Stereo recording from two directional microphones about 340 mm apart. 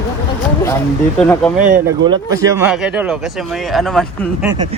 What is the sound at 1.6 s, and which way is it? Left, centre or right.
Speech, right.